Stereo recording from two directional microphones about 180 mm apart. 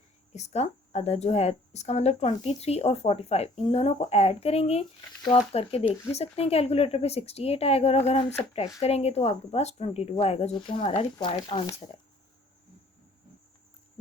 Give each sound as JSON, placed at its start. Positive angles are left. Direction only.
{"t": 0.3, "sound": "a woman's voice", "side_deg": 40}